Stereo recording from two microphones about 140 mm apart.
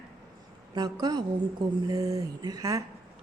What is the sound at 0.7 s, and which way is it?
A woman's voice, 30° right (ahead or behind).